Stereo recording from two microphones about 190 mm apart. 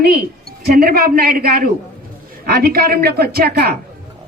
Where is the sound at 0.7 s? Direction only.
50° right (ahead or behind).